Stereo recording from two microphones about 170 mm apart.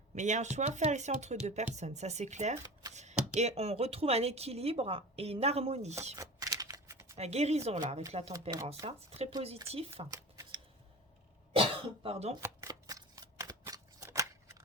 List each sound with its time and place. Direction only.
0.2 s speech: 45° right (ahead or behind)
6.1 s a sound: 20° right (ahead or behind)
7.2 s speech: 40° right (ahead or behind)
11.5 s cough: 35° right (ahead or behind)
12.4 s shuffling cards: 20° right (ahead or behind)